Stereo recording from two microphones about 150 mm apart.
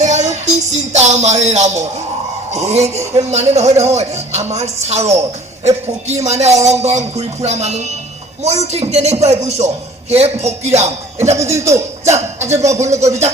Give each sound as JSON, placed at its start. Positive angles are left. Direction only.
{"t": 0.0, "sound": "music", "side_deg": -50}
{"t": 2.5, "sound": "speech", "side_deg": -45}
{"t": 11.3, "sound": "speech", "side_deg": -20}